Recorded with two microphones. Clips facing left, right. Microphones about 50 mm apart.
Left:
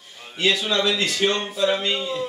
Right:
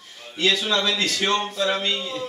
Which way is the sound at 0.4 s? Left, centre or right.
Centre.